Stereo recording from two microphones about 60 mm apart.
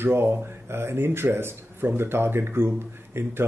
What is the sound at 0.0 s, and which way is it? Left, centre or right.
Speech, right.